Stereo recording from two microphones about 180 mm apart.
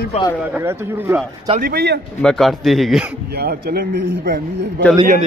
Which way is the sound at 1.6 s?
65° right (ahead or behind).